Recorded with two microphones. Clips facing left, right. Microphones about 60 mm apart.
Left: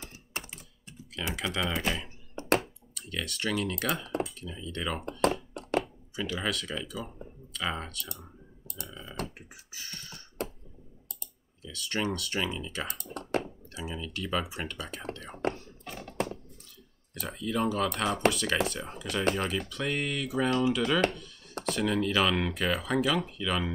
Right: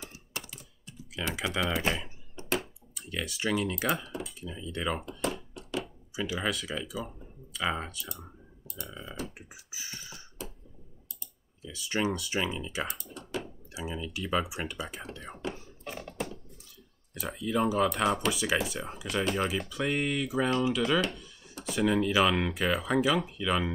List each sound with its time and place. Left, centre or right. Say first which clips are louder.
0.0 s typing: left 1 dB; left
1.3 s speech: right 1 dB; centre
5.2 s a sound: left 6 dB; left
6.1 s speech: right 1 dB; centre
9.2 s beatboxing: left 3 dB; left
9.7 s beatboxing: right 1 dB; centre
11.6 s speech: right 2 dB; centre
12.9 s computer keyboard: left 6 dB; left
13.7 s speech: right 1 dB; centre
15.1 s whispering: left 8 dB; centre
17.1 s speech: right 2 dB; centre